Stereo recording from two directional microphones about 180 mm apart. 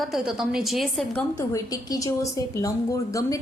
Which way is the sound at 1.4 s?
20° left (ahead or behind).